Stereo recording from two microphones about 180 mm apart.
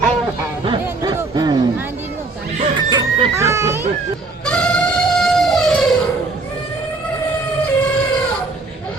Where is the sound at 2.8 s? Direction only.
20° right (ahead or behind).